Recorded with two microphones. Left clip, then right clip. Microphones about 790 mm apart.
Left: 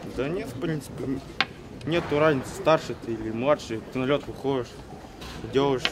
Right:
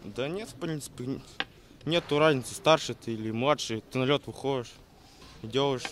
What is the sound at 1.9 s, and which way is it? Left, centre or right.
Speech, right.